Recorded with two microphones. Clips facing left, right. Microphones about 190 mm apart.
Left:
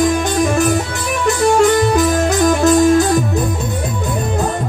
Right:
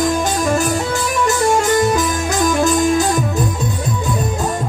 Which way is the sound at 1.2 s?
60° left (ahead or behind).